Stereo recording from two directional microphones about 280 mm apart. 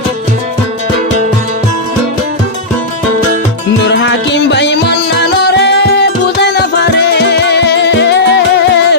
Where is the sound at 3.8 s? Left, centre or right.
Left.